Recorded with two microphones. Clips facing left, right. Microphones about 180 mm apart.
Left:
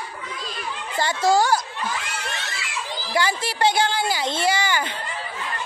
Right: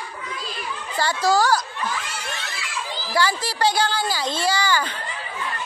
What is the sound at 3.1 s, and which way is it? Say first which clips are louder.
A woman's voice: even; 20° left (ahead or behind).